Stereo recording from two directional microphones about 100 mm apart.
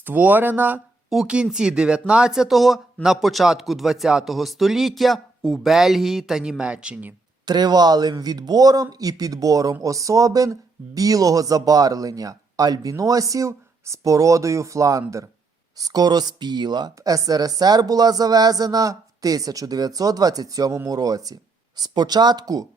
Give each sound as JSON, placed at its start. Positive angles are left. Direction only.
{"t": 0.0, "sound": "speech", "side_deg": -20}
{"t": 1.1, "sound": "speech", "side_deg": -10}
{"t": 7.4, "sound": "speech", "side_deg": -45}